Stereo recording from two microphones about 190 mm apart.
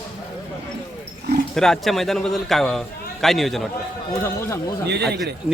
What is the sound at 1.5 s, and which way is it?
A man's voice, centre (ahead or behind).